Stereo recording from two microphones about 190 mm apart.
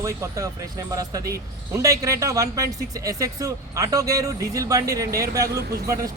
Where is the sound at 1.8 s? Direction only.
15° right (ahead or behind).